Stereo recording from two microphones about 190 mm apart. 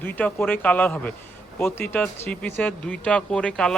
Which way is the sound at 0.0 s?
10° left (ahead or behind).